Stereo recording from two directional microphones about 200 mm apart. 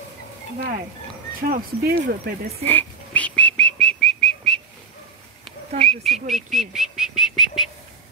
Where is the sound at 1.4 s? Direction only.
50° right (ahead or behind).